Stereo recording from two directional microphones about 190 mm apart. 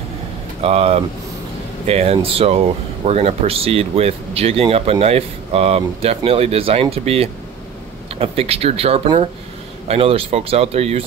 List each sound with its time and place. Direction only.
0.6 s speech: 30° right (ahead or behind)